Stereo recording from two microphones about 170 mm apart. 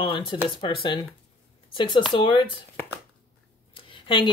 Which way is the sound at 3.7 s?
30° left (ahead or behind).